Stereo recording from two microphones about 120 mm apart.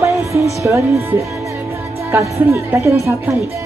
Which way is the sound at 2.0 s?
25° right (ahead or behind).